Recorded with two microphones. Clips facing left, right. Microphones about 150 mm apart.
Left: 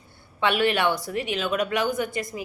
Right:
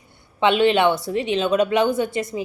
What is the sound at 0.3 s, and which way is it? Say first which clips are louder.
A woman's voice: right 6 dB; 20° right (ahead or behind).